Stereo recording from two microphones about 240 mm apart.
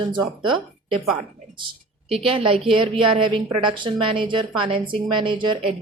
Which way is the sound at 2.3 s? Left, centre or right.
Right.